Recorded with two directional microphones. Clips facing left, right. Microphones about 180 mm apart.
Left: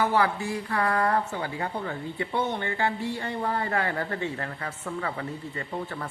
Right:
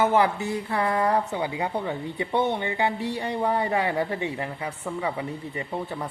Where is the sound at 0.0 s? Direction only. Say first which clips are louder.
Right 3 dB; 20° right (ahead or behind).